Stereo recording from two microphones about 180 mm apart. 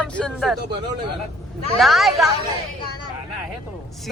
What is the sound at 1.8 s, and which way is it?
Speech, centre (ahead or behind).